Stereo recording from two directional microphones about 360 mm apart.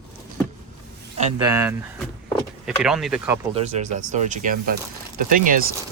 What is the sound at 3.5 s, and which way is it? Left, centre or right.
Speech, centre.